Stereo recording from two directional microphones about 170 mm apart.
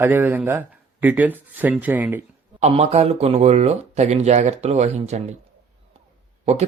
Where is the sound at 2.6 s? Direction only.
40° right (ahead or behind).